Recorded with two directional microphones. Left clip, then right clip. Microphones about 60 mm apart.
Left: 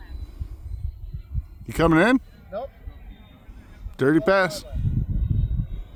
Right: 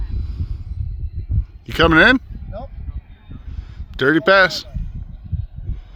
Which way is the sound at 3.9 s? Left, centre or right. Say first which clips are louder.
Right 6 dB; centre.